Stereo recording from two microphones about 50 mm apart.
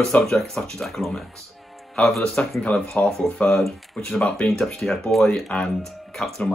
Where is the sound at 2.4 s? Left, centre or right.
Left.